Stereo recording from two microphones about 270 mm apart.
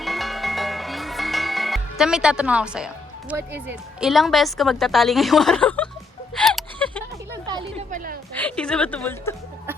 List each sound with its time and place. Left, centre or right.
0.0 s music: centre
7.9 s a sound: right
8.4 s a woman's voice: centre